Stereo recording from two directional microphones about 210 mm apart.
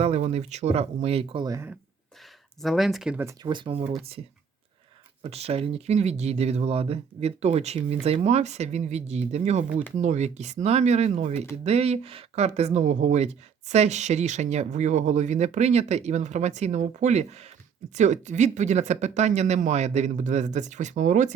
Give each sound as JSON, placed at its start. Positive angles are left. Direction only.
{"t": 0.0, "sound": "speech", "side_deg": -30}
{"t": 2.6, "sound": "speech", "side_deg": 0}
{"t": 5.2, "sound": "speech", "side_deg": -30}